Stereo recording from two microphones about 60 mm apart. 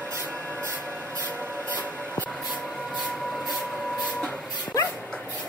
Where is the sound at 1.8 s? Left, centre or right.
Left.